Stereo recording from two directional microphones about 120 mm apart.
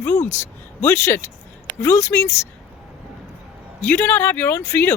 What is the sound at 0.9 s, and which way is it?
Speech, 20° left (ahead or behind).